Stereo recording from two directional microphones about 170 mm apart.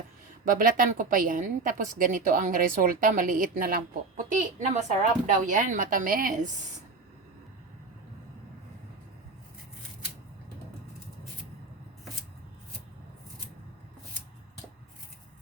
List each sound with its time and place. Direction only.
0.4 s a woman's voice: 50° right (ahead or behind)
4.3 s a woman's voice: 45° right (ahead or behind)